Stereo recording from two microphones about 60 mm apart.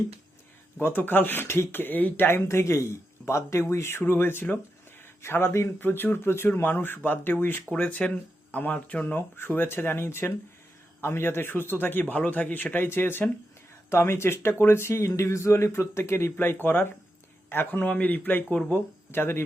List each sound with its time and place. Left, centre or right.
0.8 s speech: left
7.7 s speech: left
9.1 s speech: left